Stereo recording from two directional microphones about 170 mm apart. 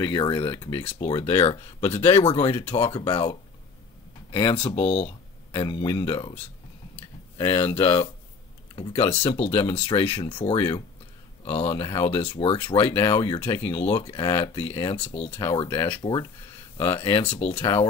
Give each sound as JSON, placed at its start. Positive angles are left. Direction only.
{"t": 0.0, "sound": "speech", "side_deg": 25}
{"t": 7.3, "sound": "speech", "side_deg": 30}